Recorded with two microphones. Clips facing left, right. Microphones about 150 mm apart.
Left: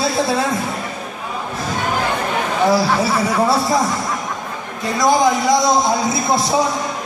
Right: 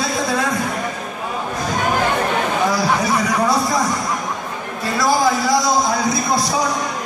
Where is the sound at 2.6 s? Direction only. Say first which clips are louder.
Left 6 dB; 30° left (ahead or behind).